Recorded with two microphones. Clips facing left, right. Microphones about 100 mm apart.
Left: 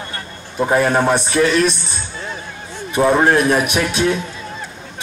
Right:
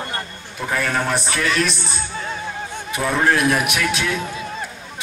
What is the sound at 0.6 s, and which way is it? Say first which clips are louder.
Speech: left 7 dB; 30° left (ahead or behind).